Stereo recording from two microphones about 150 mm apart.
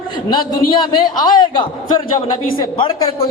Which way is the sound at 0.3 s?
30° left (ahead or behind).